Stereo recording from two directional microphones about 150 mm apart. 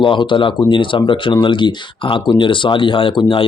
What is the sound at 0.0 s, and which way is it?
Speech, 35° left (ahead or behind).